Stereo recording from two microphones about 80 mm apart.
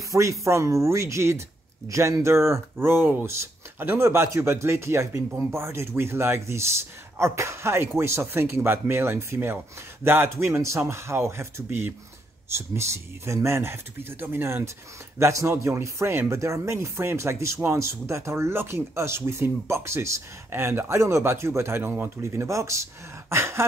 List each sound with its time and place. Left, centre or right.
0.1 s a man's voice: right